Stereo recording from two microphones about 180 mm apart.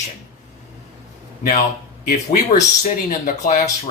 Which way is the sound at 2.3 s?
45° left (ahead or behind).